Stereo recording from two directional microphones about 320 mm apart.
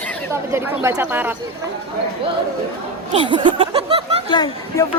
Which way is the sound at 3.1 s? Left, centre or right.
Centre.